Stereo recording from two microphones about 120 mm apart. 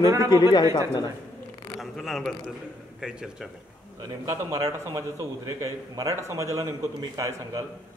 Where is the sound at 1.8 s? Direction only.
Centre (ahead or behind).